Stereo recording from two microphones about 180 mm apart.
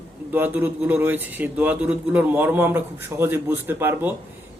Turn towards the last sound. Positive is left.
turn(degrees=-10)  # may be behind; listen again after turning